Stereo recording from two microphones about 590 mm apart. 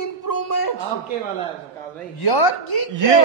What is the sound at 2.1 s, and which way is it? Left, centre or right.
Speech, left.